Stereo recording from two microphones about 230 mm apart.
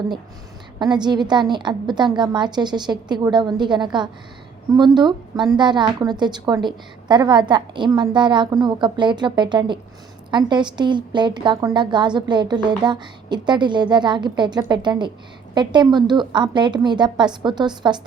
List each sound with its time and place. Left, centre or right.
0.8 s a woman's voice: centre